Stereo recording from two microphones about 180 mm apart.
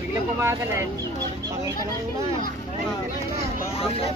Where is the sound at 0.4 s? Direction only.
15° right (ahead or behind).